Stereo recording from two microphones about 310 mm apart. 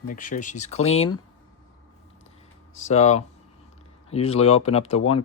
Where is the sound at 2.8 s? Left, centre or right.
Left.